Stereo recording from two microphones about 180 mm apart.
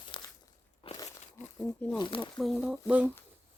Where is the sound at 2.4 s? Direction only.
Centre (ahead or behind).